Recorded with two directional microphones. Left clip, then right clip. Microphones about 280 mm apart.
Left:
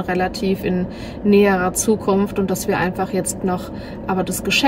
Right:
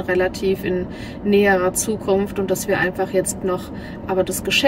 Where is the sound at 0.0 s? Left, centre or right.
Centre.